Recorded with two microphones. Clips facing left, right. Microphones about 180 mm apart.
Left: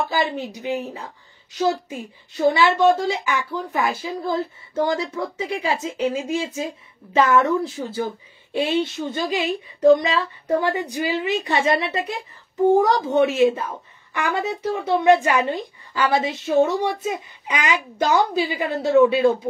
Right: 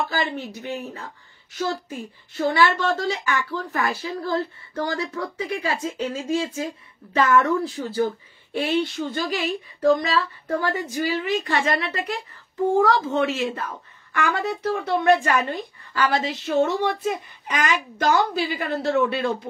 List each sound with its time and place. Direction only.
0.1 s speech: 15° left (ahead or behind)